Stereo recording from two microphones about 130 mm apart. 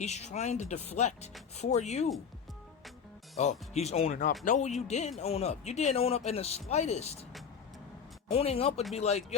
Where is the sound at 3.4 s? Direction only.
60° left (ahead or behind).